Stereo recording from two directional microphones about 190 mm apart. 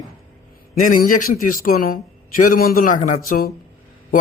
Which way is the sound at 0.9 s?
45° left (ahead or behind).